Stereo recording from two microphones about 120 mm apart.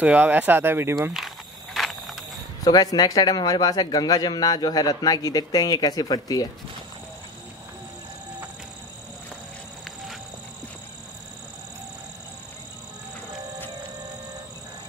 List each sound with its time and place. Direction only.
0.0 s speech: 15° right (ahead or behind)
1.1 s a sound: centre (ahead or behind)
2.6 s a man's voice: 30° left (ahead or behind)